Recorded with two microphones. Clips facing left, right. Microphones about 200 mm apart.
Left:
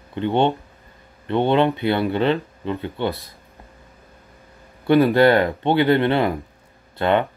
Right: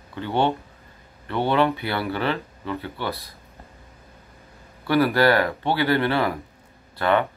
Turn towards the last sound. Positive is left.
turn(degrees=20)  # may be behind; listen again after turning